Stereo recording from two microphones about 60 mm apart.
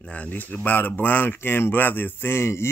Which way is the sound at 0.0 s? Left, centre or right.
Left.